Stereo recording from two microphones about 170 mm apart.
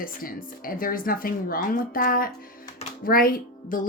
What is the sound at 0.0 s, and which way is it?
A woman's voice, 55° left (ahead or behind).